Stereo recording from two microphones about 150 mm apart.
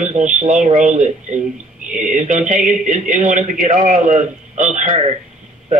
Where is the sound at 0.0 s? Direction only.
55° right (ahead or behind).